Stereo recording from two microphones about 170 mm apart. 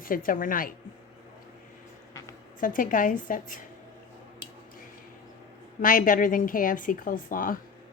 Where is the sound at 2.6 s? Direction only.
50° left (ahead or behind).